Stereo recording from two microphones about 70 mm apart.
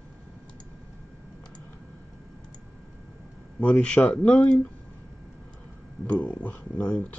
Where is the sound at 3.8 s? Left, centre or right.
Centre.